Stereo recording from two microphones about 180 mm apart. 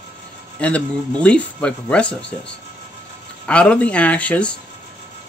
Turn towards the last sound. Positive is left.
turn(degrees=5)  # may be behind; listen again after turning